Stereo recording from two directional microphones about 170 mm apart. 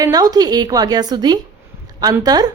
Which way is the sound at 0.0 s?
20° right (ahead or behind).